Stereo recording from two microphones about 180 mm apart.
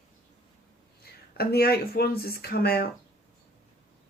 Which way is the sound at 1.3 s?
60° left (ahead or behind).